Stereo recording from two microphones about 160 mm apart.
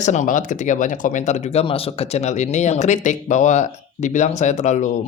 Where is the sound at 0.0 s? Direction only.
50° left (ahead or behind).